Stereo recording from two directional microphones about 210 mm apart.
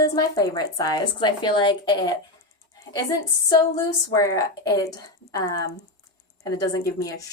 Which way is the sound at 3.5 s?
15° left (ahead or behind).